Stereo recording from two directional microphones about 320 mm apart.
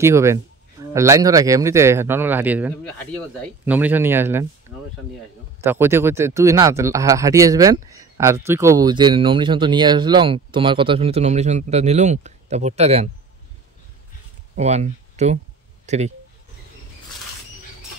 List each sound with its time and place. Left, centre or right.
0.0 s speech: centre
5.6 s speech: centre
14.6 s a sound: right